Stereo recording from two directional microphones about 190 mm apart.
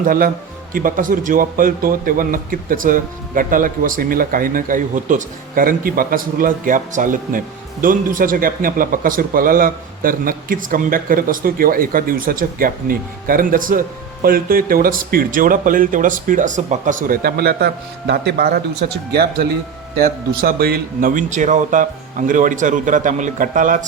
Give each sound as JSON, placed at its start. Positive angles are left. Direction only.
{"t": 0.0, "sound": "a man's voice", "side_deg": -50}